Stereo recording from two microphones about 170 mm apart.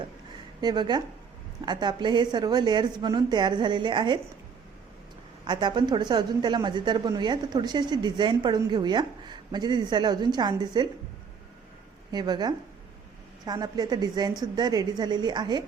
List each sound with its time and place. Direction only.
0.6 s a woman's voice: 25° right (ahead or behind)
5.5 s a woman's voice: 25° right (ahead or behind)
12.1 s a woman's voice: 25° right (ahead or behind)